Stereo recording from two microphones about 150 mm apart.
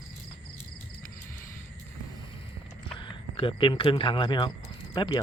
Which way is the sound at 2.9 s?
35° left (ahead or behind).